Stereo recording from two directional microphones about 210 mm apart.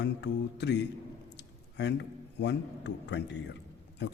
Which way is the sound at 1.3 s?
55° left (ahead or behind).